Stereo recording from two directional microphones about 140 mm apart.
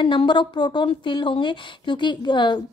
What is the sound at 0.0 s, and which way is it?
A woman's voice, 35° left (ahead or behind).